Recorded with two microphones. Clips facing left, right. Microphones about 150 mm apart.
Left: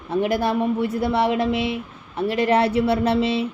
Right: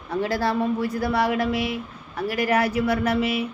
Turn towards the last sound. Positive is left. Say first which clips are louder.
# left 3 dB
turn(degrees=30)  # may be behind; listen again after turning